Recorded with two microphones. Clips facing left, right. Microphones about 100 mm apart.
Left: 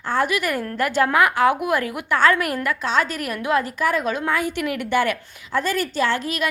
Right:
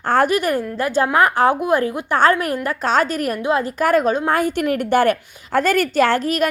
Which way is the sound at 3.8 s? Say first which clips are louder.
Right 5 dB; 50° right (ahead or behind).